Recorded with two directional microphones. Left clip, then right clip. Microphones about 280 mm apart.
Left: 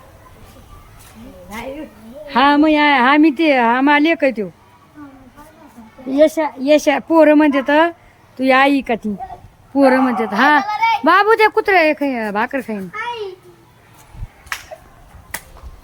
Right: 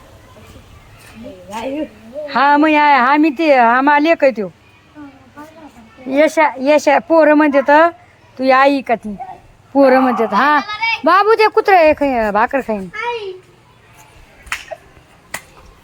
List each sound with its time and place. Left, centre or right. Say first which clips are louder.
2.2 s a woman's voice: right 1 dB; centre
6.1 s a woman's voice: right 2 dB; centre